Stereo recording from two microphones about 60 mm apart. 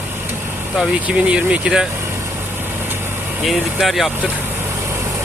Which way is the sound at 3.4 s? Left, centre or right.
Centre.